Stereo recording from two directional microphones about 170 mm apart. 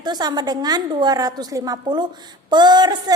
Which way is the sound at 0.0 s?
25° right (ahead or behind).